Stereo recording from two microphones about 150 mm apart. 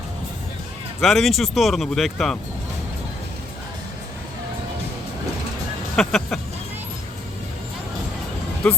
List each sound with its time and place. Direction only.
1.0 s speech: centre (ahead or behind)
6.0 s speech: centre (ahead or behind)